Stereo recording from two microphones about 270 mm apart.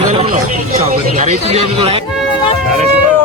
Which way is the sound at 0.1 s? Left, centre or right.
Right.